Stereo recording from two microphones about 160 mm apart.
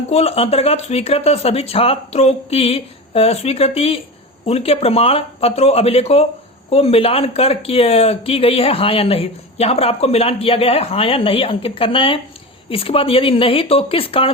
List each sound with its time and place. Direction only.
0.1 s speech: 40° left (ahead or behind)